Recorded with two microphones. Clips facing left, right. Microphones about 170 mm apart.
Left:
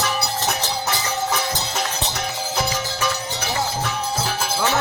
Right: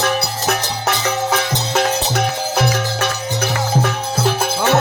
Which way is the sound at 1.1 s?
90° right.